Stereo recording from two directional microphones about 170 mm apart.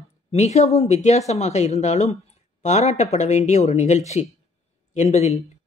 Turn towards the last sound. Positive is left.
turn(degrees=40)  # may be behind; listen again after turning